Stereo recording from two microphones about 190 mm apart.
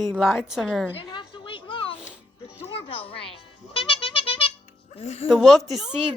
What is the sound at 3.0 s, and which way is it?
Speech, 30° left (ahead or behind).